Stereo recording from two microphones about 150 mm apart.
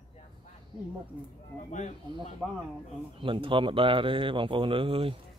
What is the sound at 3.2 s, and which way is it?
Speech, 35° right (ahead or behind).